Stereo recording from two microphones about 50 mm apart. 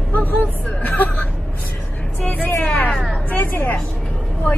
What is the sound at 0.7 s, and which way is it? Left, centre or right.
Hubbub, left.